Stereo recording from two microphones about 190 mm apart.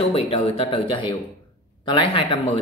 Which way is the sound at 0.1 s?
30° left (ahead or behind).